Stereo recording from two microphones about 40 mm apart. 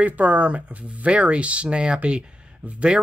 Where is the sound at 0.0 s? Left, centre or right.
Right.